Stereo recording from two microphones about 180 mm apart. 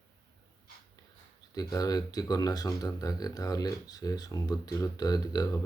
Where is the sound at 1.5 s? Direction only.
20° left (ahead or behind).